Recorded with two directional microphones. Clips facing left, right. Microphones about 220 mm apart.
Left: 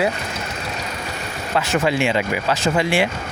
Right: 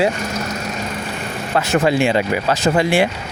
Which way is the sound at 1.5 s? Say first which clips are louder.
Right 3 dB; 40° right (ahead or behind).